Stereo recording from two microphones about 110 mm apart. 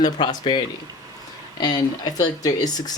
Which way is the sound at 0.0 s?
40° left (ahead or behind).